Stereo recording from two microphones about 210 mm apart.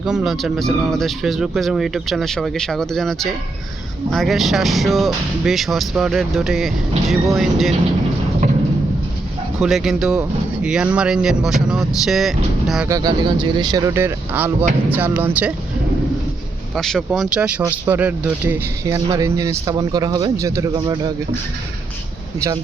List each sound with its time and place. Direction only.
0.0 s speech: 5° right (ahead or behind)
9.6 s speech: centre (ahead or behind)
12.9 s speech: 20° right (ahead or behind)
16.7 s speech: centre (ahead or behind); by 21.1 s 20° right (ahead or behind)